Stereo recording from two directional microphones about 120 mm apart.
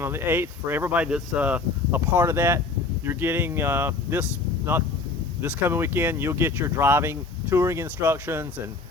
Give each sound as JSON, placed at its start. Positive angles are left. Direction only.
{"t": 0.0, "sound": "speech", "side_deg": -20}